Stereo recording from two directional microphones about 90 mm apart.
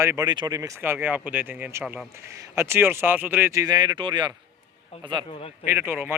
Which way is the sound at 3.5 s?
50° right (ahead or behind).